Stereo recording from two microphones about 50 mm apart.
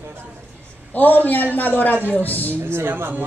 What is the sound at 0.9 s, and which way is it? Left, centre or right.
Speech, left.